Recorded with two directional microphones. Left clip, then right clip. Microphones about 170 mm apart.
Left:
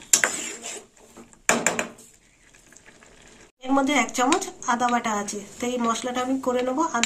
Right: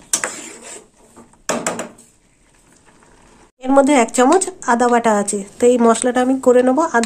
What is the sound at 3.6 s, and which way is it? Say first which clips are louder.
Speech: right 9 dB; 85° right.